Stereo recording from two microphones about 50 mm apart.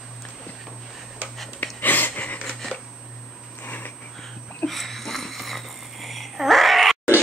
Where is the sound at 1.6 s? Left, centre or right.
Left.